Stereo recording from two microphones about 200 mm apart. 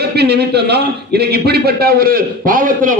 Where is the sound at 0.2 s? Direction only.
55° right (ahead or behind).